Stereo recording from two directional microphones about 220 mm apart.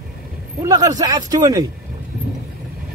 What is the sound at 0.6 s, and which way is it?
Speech, 15° right (ahead or behind).